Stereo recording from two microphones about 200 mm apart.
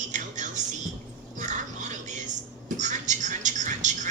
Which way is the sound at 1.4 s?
35° right (ahead or behind).